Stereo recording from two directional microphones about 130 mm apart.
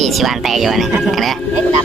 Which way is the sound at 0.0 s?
Centre (ahead or behind).